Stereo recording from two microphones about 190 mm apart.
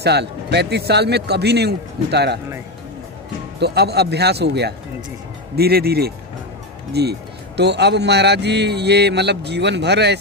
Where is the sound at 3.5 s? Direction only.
60° right (ahead or behind).